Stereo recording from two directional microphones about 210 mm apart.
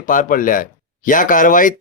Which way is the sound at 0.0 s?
40° left (ahead or behind).